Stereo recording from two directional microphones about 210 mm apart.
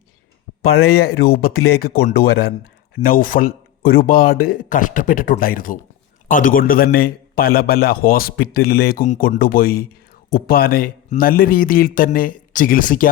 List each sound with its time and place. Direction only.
0.8 s a man's voice: 50° left (ahead or behind)